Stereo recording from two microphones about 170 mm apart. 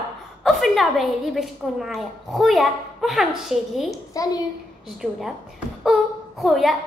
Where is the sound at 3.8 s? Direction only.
20° left (ahead or behind).